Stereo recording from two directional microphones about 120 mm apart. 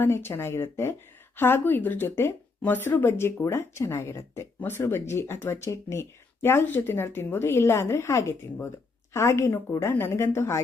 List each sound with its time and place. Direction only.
0.0 s speech: 20° left (ahead or behind)